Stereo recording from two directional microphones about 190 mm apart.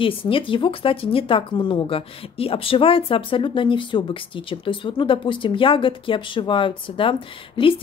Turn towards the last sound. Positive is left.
turn(degrees=30)  # may be behind; listen again after turning